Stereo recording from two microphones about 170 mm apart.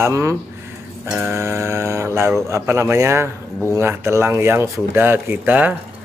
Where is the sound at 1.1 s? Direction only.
10° right (ahead or behind).